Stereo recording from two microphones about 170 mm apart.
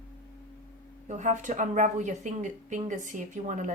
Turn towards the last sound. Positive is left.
turn(degrees=-45)  # may be behind; listen again after turning